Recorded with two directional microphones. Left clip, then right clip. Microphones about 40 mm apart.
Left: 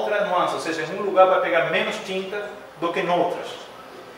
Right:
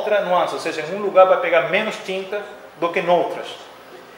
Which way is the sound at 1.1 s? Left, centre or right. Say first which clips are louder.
Right 3 dB; right.